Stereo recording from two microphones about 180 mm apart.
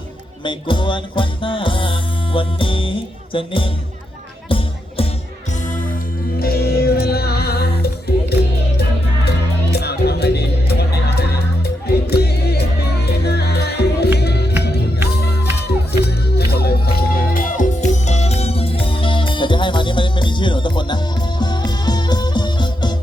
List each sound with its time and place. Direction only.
0.4 s music: 25° left (ahead or behind)
3.3 s speech: 30° left (ahead or behind)
4.4 s music: 30° left (ahead or behind)
6.4 s music: 60° left (ahead or behind)
9.7 s music: 65° left (ahead or behind); by 23.0 s 25° left (ahead or behind)